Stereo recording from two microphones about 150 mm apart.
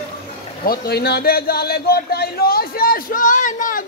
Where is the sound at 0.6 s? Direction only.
85° left.